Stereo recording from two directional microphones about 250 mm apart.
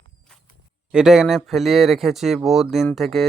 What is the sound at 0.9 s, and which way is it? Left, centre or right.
Speech, centre.